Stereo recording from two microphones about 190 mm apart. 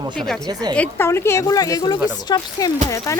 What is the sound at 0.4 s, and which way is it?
Speech, 20° right (ahead or behind).